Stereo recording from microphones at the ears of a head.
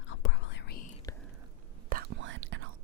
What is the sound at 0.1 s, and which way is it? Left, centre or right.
Whispering, left.